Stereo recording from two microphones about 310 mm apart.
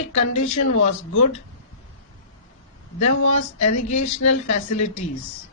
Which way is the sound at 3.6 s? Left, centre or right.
Left.